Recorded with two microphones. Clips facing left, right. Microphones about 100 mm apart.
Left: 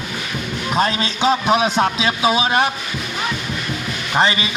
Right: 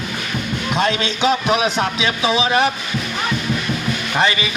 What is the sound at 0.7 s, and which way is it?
A man's voice, 40° left (ahead or behind).